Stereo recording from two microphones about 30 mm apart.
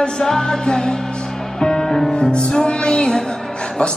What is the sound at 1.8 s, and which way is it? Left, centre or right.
Music, centre.